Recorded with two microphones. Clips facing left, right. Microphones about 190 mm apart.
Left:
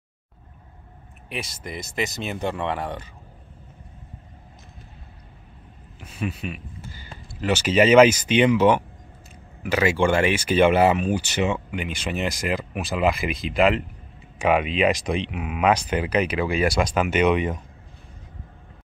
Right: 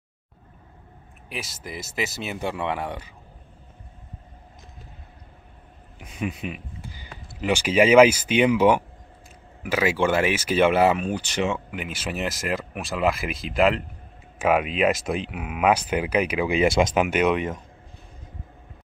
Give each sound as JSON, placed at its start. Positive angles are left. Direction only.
{"t": 1.3, "sound": "speech", "side_deg": 0}
{"t": 5.9, "sound": "a sound", "side_deg": -15}
{"t": 7.2, "sound": "speech", "side_deg": -10}